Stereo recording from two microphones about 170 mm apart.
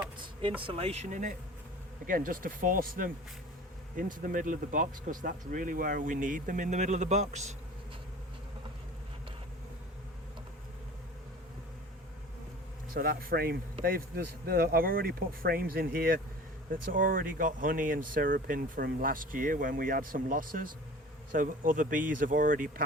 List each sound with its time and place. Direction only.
0.6 s speech: 35° right (ahead or behind)
12.9 s speech: 60° right (ahead or behind)